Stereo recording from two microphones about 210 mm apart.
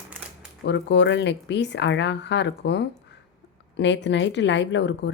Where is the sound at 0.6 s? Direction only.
55° left (ahead or behind).